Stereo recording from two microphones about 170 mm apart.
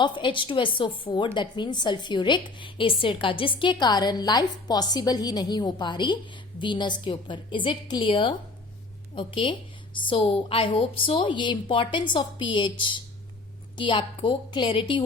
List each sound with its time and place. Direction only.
0.0 s a woman's voice: 30° left (ahead or behind)